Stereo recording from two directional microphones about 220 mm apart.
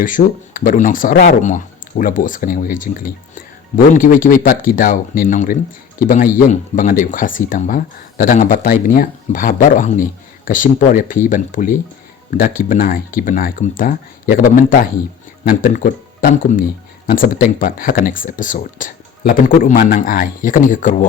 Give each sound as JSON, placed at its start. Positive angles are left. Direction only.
{"t": 0.0, "sound": "speech", "side_deg": 35}